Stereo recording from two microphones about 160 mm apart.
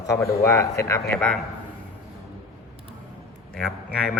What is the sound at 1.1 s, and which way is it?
Speech, 5° left (ahead or behind).